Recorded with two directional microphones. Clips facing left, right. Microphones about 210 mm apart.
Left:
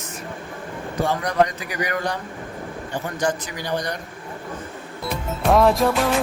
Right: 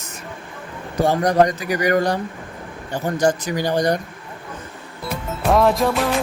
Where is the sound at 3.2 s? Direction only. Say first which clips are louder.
Right 6 dB; 40° right (ahead or behind).